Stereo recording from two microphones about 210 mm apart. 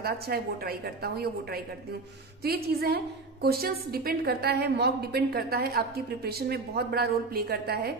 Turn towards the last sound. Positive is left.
turn(degrees=-50)  # may be behind; listen again after turning